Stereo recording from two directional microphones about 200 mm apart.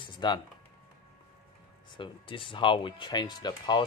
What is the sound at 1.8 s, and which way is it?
Speech, 25° left (ahead or behind).